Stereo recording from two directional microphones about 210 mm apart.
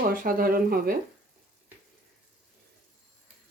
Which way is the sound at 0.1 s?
45° right (ahead or behind).